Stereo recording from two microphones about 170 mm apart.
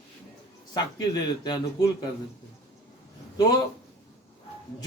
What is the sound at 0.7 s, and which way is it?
Speech, 25° left (ahead or behind).